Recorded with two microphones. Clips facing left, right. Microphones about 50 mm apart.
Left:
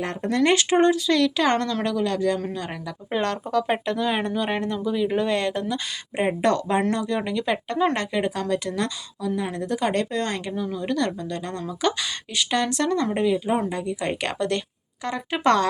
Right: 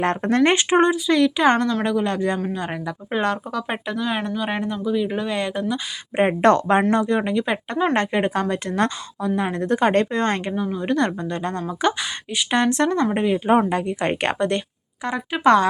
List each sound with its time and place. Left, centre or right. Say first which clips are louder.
0.0 s a woman's voice: right 4 dB; right
0.5 s speech: right 1 dB; right
6.1 s a woman's voice: right 5 dB; right
7.2 s speech: right 3 dB; right
7.9 s a woman's voice: right 5 dB; right
13.3 s a woman's voice: right 5 dB; right
15.3 s speech: right 4 dB; centre